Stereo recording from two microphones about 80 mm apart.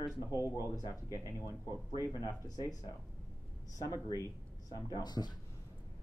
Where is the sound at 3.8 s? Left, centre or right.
Left.